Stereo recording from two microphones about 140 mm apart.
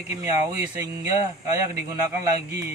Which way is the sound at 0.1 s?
20° right (ahead or behind).